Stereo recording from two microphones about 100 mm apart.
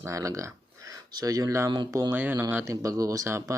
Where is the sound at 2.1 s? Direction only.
20° right (ahead or behind).